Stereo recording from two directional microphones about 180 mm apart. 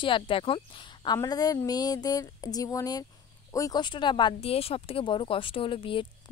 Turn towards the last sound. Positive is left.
turn(degrees=30)  # may be behind; listen again after turning